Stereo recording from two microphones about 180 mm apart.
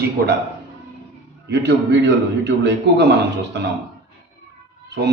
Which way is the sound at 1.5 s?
70° right (ahead or behind).